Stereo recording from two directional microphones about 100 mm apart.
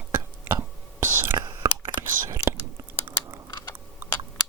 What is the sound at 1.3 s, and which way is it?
Whispering, 45° right (ahead or behind).